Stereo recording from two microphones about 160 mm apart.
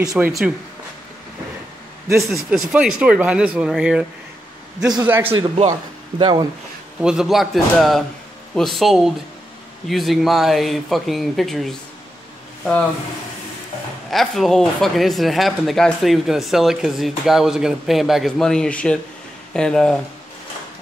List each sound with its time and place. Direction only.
0.1 s speech: centre (ahead or behind)
2.3 s speech: 5° right (ahead or behind)
5.0 s speech: 10° right (ahead or behind)
5.7 s speech: 30° right (ahead or behind)
7.0 s speech: 5° right (ahead or behind)
14.1 s speech: centre (ahead or behind)